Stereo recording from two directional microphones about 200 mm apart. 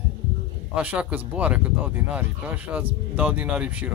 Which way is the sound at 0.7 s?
5° right (ahead or behind).